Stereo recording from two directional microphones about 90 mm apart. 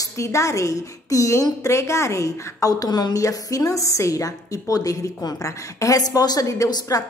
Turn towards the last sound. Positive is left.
turn(degrees=40)  # may be behind; listen again after turning